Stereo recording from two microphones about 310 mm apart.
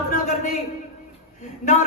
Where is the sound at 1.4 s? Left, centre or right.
Left.